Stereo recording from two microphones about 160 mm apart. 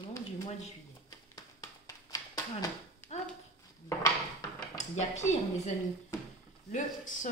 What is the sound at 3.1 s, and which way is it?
Horse, 45° left (ahead or behind).